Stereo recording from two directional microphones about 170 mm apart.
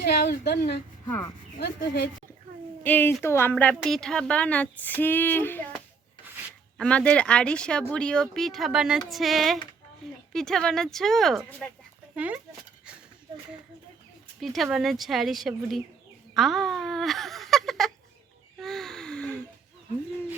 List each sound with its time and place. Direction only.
0.5 s speech: 80° left
2.8 s a woman's voice: 10° left (ahead or behind)
6.7 s speech: 5° left (ahead or behind)
10.0 s a sound: centre (ahead or behind)
10.3 s speech: 5° left (ahead or behind)
14.4 s speech: centre (ahead or behind)
18.6 s gasp: centre (ahead or behind)